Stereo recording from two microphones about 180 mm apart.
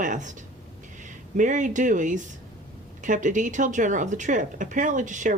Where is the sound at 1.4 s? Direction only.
45° right (ahead or behind).